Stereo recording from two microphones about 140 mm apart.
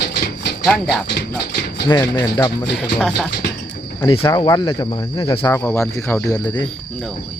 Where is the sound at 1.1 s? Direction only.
90° left.